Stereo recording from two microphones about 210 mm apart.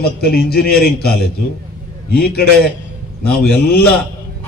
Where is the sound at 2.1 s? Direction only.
50° left (ahead or behind).